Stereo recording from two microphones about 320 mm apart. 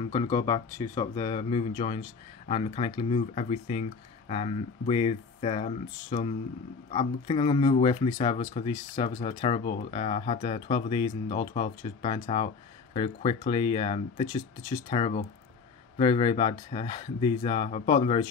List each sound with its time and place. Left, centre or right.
0.0 s speech: centre